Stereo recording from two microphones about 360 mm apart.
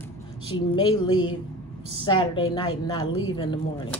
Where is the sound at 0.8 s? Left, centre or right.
Centre.